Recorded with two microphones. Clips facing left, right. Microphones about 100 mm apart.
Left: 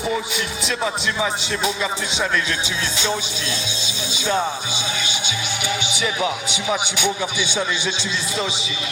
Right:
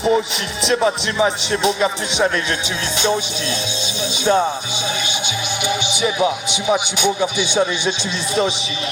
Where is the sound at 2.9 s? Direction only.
20° right (ahead or behind).